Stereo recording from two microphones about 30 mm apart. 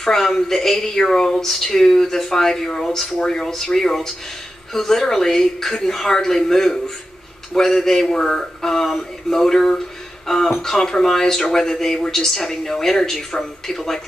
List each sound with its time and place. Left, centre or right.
0.0 s speech: centre